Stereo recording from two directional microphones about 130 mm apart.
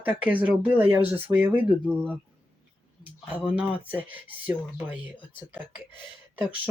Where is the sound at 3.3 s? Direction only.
10° right (ahead or behind).